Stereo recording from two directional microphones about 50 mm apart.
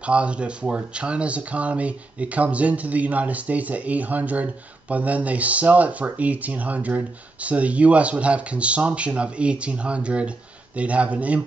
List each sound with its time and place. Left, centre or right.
0.0 s speech: right